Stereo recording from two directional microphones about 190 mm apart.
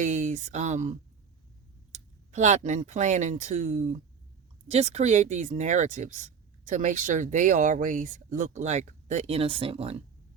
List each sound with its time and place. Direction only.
0.0 s speech: 40° right (ahead or behind)